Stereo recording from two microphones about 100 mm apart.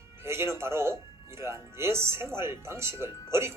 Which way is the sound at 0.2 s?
25° right (ahead or behind).